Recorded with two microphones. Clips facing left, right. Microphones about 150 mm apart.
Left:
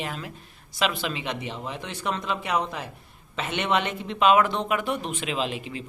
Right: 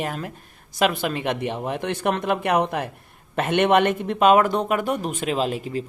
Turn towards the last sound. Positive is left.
turn(degrees=-40)  # may be behind; listen again after turning